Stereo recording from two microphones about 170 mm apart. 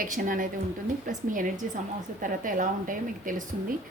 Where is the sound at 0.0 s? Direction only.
55° right (ahead or behind).